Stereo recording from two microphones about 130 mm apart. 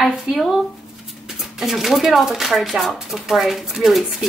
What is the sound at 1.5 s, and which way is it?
Speech, centre (ahead or behind).